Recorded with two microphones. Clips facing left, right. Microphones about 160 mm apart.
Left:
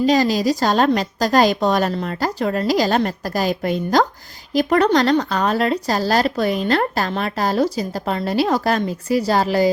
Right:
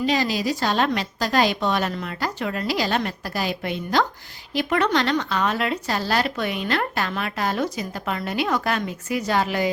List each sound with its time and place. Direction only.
0.0 s speech: 40° left (ahead or behind)